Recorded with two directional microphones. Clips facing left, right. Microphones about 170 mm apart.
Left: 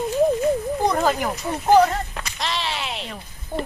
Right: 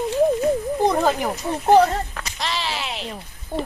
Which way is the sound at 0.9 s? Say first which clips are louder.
Right 1 dB; 20° right (ahead or behind).